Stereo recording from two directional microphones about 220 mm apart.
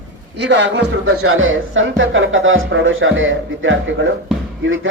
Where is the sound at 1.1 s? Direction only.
75° right (ahead or behind).